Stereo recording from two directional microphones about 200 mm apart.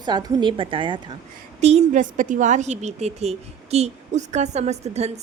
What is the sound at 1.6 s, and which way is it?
A woman's voice, 35° right (ahead or behind).